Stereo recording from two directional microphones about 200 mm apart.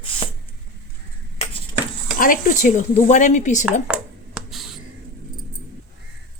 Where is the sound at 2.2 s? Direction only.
40° left (ahead or behind).